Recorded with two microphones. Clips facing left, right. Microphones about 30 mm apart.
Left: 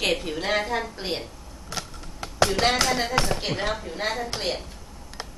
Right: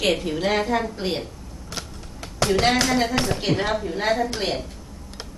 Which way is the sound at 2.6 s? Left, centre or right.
Centre.